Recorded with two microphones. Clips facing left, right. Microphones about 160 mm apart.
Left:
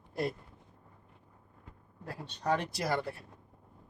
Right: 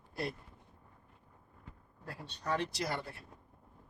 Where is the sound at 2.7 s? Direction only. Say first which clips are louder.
Left 4 dB; 55° left (ahead or behind).